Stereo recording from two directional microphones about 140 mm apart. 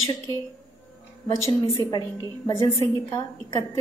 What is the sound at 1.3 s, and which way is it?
A woman's voice, 25° left (ahead or behind).